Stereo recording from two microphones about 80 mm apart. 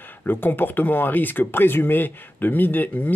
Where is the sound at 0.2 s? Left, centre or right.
Left.